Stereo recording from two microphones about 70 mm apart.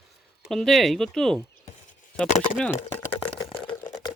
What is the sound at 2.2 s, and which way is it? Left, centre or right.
Chopping, centre.